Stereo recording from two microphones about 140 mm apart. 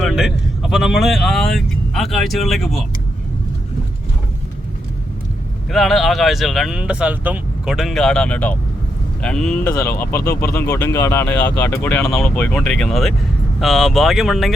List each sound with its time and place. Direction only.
0.0 s speech: 5° right (ahead or behind)
5.7 s speech: centre (ahead or behind)
10.0 s speech: 20° left (ahead or behind)
12.5 s speech: 5° left (ahead or behind)